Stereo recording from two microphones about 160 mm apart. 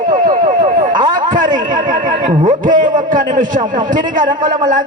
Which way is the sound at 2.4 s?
55° right (ahead or behind).